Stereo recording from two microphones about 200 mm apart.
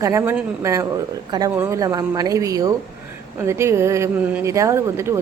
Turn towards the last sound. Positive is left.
turn(degrees=-15)  # may be behind; listen again after turning